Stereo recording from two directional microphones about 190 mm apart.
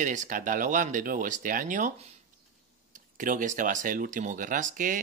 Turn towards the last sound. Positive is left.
turn(degrees=-45)  # may be behind; listen again after turning